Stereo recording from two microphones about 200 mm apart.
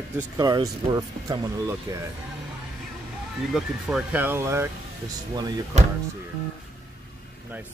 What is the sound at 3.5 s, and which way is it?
Speech, 5° right (ahead or behind).